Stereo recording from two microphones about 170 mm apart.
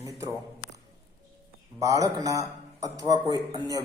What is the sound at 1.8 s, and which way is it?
A man's voice, 20° right (ahead or behind).